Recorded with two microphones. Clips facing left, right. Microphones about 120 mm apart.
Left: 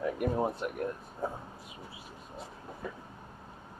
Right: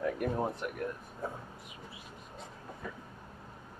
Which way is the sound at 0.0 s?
15° left (ahead or behind).